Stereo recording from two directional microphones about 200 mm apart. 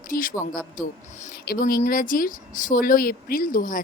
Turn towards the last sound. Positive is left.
turn(degrees=45)  # may be behind; listen again after turning